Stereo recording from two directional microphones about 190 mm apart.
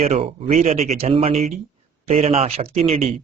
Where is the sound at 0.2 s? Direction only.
30° right (ahead or behind).